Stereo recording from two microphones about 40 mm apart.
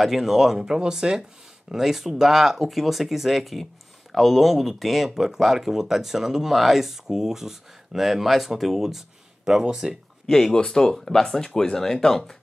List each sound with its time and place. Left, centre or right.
0.0 s speech: centre
10.2 s speech: centre